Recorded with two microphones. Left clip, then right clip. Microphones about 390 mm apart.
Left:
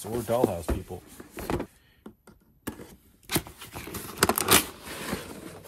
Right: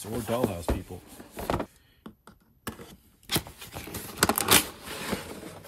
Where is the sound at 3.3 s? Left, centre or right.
Centre.